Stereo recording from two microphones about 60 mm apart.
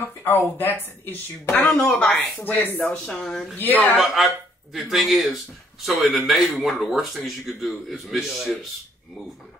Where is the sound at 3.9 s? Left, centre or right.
Centre.